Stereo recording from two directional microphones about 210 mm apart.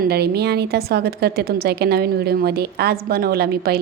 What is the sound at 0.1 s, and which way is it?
A woman's voice, 50° right (ahead or behind).